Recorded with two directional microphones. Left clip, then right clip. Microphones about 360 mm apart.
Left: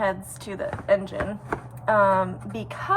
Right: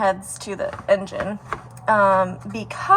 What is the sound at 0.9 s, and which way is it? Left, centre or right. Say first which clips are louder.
A woman's voice: right 3 dB; right.